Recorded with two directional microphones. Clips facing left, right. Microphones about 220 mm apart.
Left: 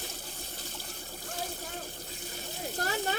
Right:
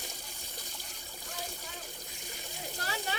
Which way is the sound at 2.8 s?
50° left (ahead or behind).